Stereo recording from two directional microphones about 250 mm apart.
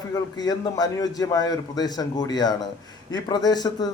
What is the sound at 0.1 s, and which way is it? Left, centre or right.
A man's voice, centre.